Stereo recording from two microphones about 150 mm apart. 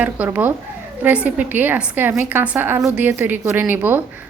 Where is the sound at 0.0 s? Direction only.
10° right (ahead or behind).